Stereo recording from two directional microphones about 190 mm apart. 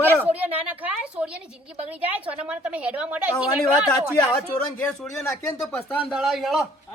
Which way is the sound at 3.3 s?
5° left (ahead or behind).